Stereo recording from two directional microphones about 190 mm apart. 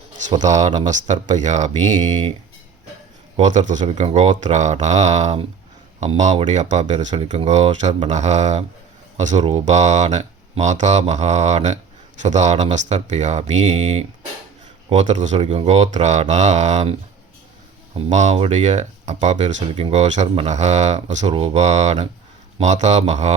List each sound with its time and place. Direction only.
0.3 s speech: 40° right (ahead or behind)
3.3 s speech: 40° right (ahead or behind)
17.9 s speech: 40° right (ahead or behind)